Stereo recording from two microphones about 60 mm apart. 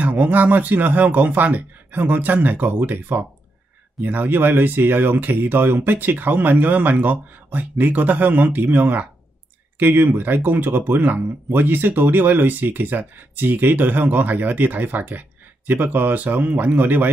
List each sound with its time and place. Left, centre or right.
0.0 s speech: right